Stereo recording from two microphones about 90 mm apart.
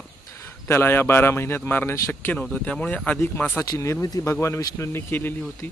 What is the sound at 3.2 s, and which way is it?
A man's voice, 25° left (ahead or behind).